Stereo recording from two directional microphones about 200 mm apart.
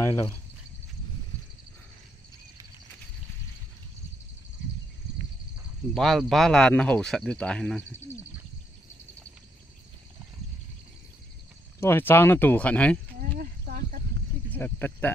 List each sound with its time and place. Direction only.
0.0 s speech: 15° left (ahead or behind)
5.9 s speech: centre (ahead or behind)
11.8 s speech: 10° left (ahead or behind)
13.2 s a sound: 45° right (ahead or behind)
14.5 s speech: 10° left (ahead or behind)